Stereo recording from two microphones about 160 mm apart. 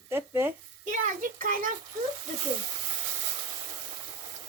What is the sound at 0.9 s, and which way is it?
Speech, 55° right (ahead or behind).